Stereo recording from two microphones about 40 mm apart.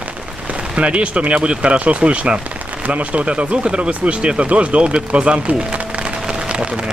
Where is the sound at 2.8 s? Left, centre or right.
Right.